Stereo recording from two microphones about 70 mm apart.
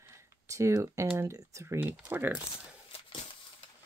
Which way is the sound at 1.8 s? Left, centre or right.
Right.